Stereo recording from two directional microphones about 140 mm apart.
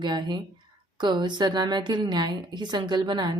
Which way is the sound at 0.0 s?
35° right (ahead or behind).